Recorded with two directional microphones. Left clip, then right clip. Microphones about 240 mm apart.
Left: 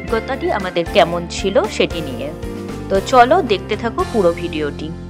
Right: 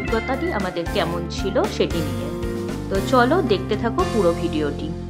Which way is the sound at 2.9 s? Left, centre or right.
Left.